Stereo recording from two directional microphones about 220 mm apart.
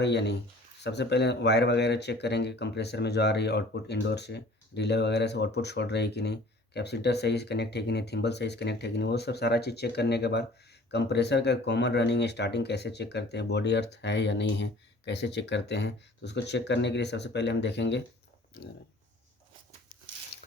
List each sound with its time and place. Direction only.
0.0 s speech: 50° left (ahead or behind)